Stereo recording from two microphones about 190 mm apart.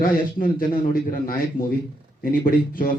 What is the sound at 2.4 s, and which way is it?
Speech, 50° left (ahead or behind).